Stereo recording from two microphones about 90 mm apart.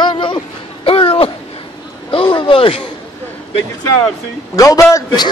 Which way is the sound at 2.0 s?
75° left (ahead or behind).